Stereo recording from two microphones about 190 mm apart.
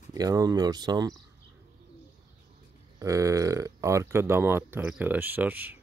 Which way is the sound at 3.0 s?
15° right (ahead or behind).